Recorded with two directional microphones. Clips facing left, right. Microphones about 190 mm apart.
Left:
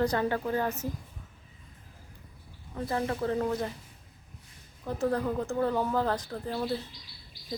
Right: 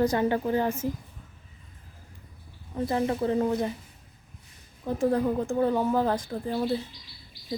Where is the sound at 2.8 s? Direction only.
20° right (ahead or behind).